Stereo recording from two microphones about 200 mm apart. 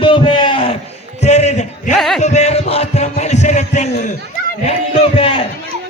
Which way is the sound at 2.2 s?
35° left (ahead or behind).